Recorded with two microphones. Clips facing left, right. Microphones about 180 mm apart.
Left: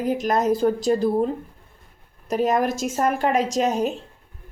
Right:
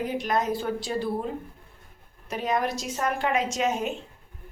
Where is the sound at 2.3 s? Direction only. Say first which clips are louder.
Left 6 dB; 40° left (ahead or behind).